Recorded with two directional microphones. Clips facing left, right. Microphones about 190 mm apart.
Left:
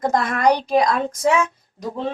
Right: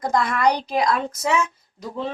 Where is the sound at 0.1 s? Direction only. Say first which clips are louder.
Right 1 dB; 45° left (ahead or behind).